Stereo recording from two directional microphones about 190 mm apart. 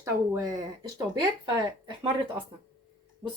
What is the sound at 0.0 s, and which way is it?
Speech, 20° right (ahead or behind).